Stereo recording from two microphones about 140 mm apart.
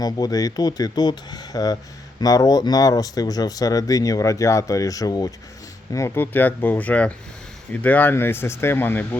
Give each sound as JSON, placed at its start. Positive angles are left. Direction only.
{"t": 0.0, "sound": "speech", "side_deg": 25}